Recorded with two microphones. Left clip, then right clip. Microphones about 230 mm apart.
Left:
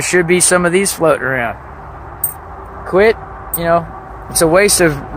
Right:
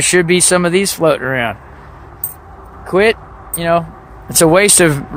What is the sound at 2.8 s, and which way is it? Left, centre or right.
Vehicle, right.